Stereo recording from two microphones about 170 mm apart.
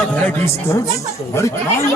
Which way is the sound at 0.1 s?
15° left (ahead or behind).